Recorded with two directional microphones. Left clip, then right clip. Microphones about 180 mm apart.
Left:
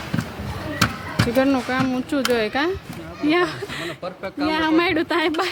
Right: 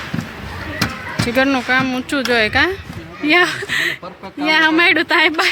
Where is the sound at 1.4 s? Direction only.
5° left (ahead or behind).